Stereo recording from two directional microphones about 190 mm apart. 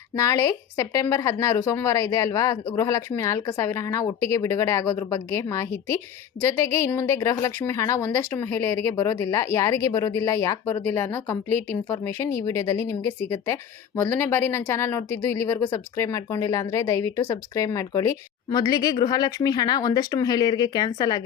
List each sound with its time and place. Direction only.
0.2 s speech: 15° left (ahead or behind)